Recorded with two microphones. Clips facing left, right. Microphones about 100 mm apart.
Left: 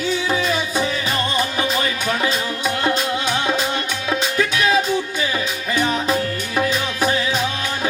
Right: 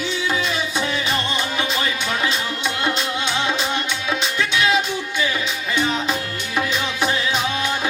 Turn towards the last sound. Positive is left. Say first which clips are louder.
# left 2 dB
turn(degrees=40)  # may be behind; listen again after turning